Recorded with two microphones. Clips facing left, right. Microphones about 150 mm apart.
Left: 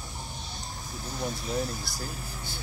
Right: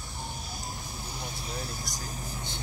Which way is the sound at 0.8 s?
15° right (ahead or behind).